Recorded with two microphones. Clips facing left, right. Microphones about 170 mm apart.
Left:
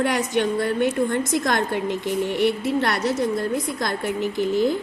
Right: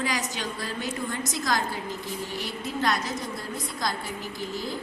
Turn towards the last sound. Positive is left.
turn(degrees=65)  # may be behind; listen again after turning